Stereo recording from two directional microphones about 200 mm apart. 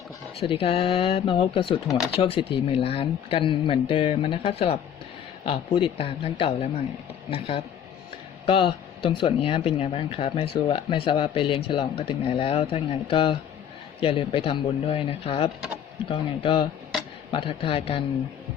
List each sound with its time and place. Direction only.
0.3 s speech: 30° left (ahead or behind)